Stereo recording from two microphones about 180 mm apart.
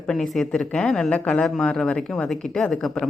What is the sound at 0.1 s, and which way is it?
A woman's voice, centre (ahead or behind).